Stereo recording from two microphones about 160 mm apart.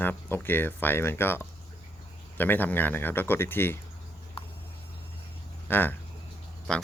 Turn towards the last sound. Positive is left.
turn(degrees=5)  # may be behind; listen again after turning